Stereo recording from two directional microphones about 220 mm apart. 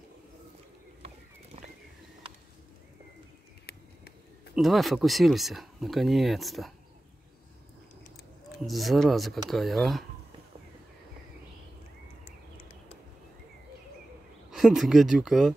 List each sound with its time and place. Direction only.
3.7 s a sound: 45° left (ahead or behind)
4.6 s speech: centre (ahead or behind)
8.6 s speech: centre (ahead or behind)
14.5 s speech: centre (ahead or behind)